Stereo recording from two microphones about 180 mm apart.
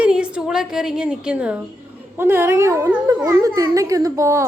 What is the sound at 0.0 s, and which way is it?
A woman's voice, 5° right (ahead or behind).